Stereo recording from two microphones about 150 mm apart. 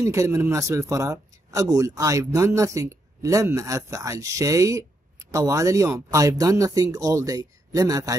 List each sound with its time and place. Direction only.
0.0 s a man's voice: 20° right (ahead or behind)